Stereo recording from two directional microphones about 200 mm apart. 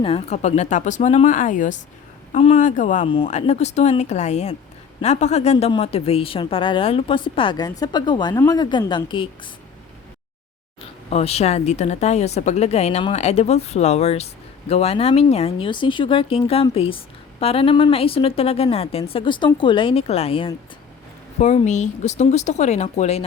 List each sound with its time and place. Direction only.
0.0 s a woman's voice: 30° left (ahead or behind)
11.1 s a woman's voice: 30° left (ahead or behind)